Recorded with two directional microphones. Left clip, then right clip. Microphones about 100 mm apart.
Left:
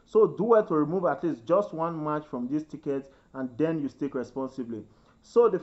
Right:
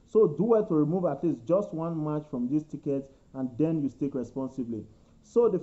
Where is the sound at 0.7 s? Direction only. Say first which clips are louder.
Left 1 dB; 40° left (ahead or behind).